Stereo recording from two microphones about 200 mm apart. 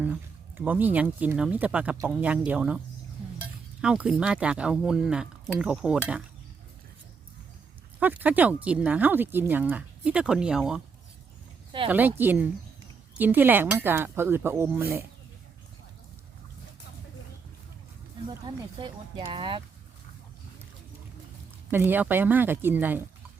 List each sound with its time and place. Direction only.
0.0 s speech: 5° right (ahead or behind)
7.9 s speech: 10° right (ahead or behind)
11.9 s speech: 10° right (ahead or behind)
18.3 s speech: 25° right (ahead or behind)
21.7 s speech: 10° right (ahead or behind)